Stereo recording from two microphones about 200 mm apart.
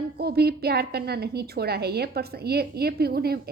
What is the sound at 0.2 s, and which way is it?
A woman's voice, 50° right (ahead or behind).